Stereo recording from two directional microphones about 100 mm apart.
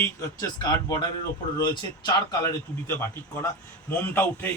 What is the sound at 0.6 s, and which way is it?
Speech, 45° left (ahead or behind).